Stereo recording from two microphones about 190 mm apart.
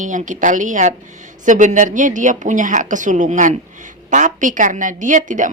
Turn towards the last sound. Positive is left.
turn(degrees=-40)  # may be behind; listen again after turning